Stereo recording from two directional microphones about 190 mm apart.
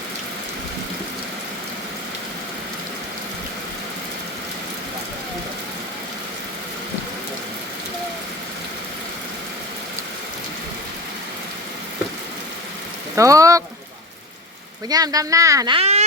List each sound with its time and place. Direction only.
13.1 s speech: 15° right (ahead or behind)
14.8 s speech: 20° right (ahead or behind)